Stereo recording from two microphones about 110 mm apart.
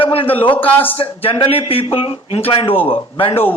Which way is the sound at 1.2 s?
55° left (ahead or behind).